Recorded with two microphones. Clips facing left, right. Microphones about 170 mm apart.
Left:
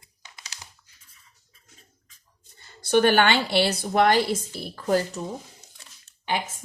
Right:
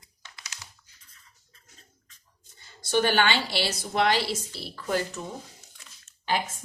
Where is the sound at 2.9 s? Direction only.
55° left (ahead or behind); by 5.2 s 40° left (ahead or behind).